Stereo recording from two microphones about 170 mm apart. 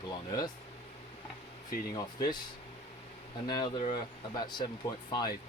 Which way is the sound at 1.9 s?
25° left (ahead or behind).